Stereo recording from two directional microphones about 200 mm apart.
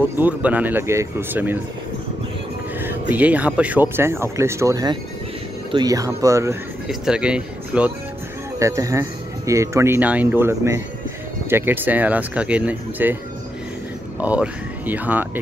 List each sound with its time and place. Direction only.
0.2 s speech: 10° right (ahead or behind)
2.8 s speech: 10° right (ahead or behind)
6.9 s speech: 5° right (ahead or behind)
14.2 s speech: 5° right (ahead or behind)